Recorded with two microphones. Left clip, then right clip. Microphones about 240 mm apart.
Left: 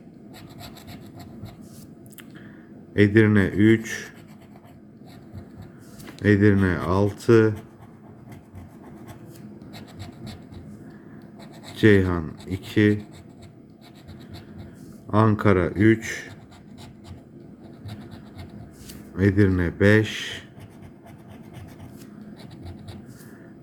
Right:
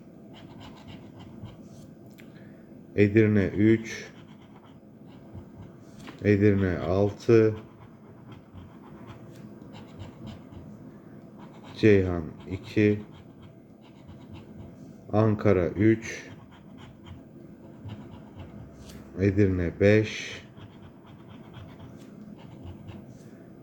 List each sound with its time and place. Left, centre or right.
2.9 s speech: centre
6.2 s speech: centre
11.8 s speech: centre
15.1 s speech: centre
19.1 s speech: centre